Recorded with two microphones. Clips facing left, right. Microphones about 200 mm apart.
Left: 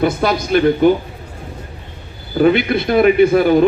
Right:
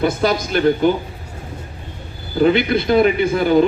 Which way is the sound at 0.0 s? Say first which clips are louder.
Left 1 dB; 60° left (ahead or behind).